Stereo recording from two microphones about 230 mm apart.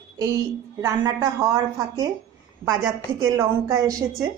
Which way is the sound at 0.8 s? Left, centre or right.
Centre.